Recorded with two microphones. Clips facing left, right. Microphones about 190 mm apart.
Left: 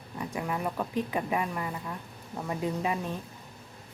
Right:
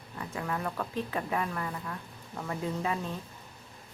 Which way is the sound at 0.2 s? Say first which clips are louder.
Left 2 dB; 15° left (ahead or behind).